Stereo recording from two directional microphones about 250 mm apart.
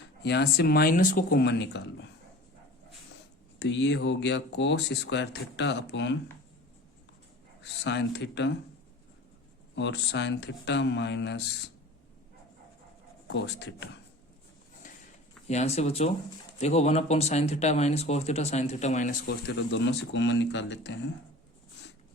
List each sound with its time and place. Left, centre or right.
0.2 s speech: left
3.6 s speech: left
7.6 s speech: left
9.7 s speech: left
13.2 s speech: left
14.8 s a sound: left
15.4 s speech: left
19.5 s speech: left